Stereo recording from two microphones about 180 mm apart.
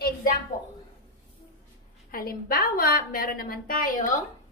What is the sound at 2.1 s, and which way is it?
Speech, 55° left (ahead or behind).